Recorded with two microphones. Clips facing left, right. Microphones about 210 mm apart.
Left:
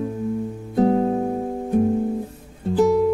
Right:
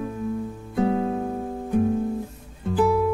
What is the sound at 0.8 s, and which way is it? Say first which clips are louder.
Music: left 5 dB; 40° left (ahead or behind).